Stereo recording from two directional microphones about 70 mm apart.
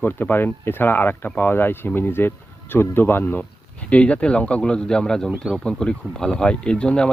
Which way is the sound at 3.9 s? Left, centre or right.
Centre.